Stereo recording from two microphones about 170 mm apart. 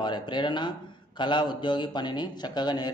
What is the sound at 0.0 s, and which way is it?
A man's voice, 25° left (ahead or behind).